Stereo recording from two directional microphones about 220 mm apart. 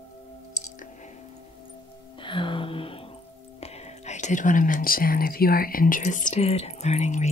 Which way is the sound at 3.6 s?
30° left (ahead or behind).